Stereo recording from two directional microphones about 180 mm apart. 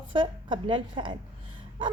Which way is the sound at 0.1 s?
25° right (ahead or behind).